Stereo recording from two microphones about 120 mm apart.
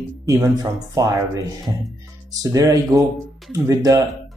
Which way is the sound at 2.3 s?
30° right (ahead or behind).